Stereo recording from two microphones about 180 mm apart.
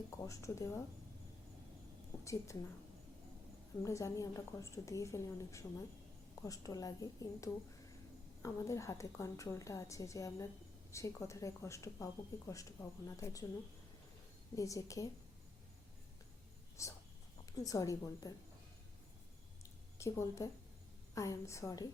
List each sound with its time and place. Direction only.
0.1 s speech: 15° left (ahead or behind)
2.2 s speech: 15° left (ahead or behind)
3.8 s a woman's voice: 15° left (ahead or behind)
14.5 s a woman's voice: 20° left (ahead or behind)
16.8 s a woman's voice: 15° left (ahead or behind)
20.0 s speech: 15° left (ahead or behind)